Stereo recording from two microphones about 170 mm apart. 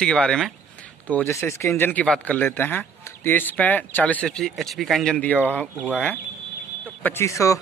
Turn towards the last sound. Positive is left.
turn(degrees=20)  # may be behind; listen again after turning